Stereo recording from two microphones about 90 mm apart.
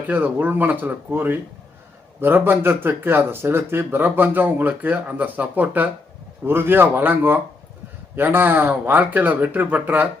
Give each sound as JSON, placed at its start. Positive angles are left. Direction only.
{"t": 0.1, "sound": "speech", "side_deg": -20}